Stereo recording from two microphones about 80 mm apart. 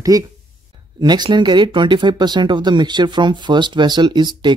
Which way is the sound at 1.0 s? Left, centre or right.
Right.